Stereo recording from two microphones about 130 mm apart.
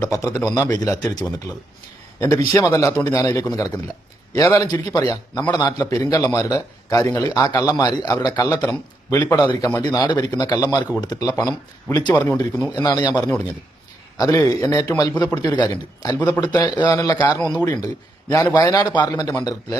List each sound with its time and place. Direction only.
0.0 s a man's voice: 30° left (ahead or behind)